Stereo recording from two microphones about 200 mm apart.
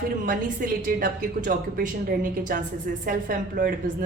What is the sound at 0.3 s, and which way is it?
A woman's voice, 40° right (ahead or behind).